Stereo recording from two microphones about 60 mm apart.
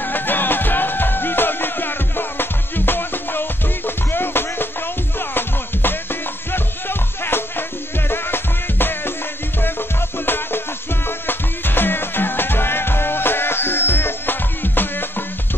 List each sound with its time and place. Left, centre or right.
0.0 s music: left